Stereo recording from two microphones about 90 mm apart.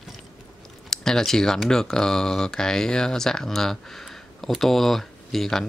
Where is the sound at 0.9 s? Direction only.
5° left (ahead or behind).